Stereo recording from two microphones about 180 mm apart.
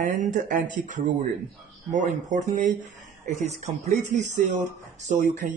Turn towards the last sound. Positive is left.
turn(degrees=-45)  # may be behind; listen again after turning